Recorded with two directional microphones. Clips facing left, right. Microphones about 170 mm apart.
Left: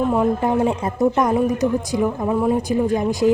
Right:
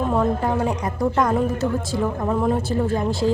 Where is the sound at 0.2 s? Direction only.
20° left (ahead or behind).